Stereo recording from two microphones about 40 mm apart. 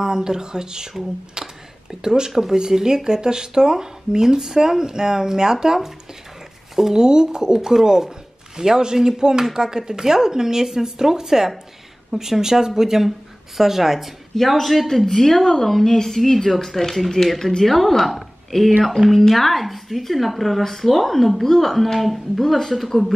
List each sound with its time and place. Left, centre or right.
0.0 s a woman's voice: centre